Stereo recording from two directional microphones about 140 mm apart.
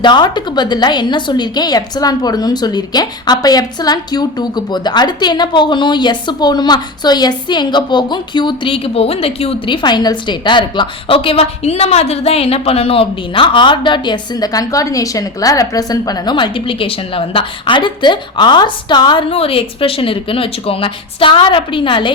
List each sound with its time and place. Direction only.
0.0 s a woman's voice: 35° left (ahead or behind)